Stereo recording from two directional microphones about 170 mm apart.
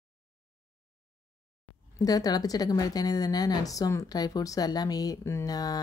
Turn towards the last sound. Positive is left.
turn(degrees=20)  # may be behind; listen again after turning